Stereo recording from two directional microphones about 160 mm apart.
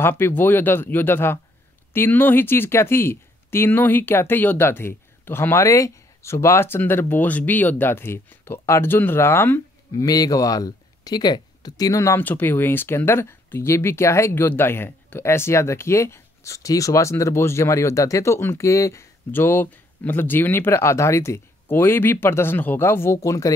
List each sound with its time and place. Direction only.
0.0 s speech: 10° left (ahead or behind)